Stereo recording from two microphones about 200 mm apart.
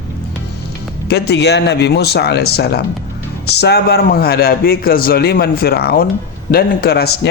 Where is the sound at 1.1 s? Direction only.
55° left (ahead or behind).